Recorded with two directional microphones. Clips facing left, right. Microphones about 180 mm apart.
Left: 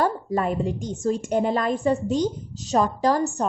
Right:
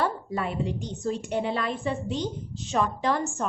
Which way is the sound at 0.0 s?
45° left (ahead or behind).